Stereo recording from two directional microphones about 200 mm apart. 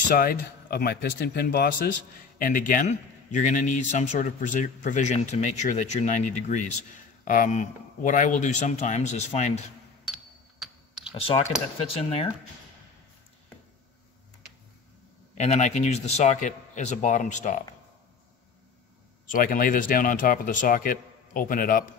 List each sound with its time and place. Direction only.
0.1 s a man's voice: 45° left (ahead or behind)
10.0 s a sound: centre (ahead or behind)
11.1 s speech: 30° left (ahead or behind)
15.3 s a man's voice: 35° left (ahead or behind)
19.3 s a man's voice: 45° left (ahead or behind)